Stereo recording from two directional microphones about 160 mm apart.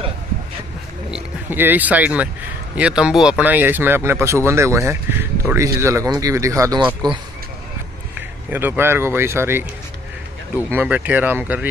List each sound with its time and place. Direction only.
1.1 s speech: 10° right (ahead or behind); by 7.2 s 30° right (ahead or behind)
8.5 s speech: 10° right (ahead or behind)